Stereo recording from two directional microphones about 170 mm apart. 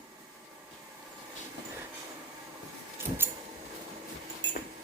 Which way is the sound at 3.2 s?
10° right (ahead or behind).